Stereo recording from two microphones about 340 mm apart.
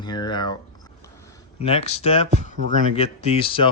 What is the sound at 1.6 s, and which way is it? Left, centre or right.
Speech, centre.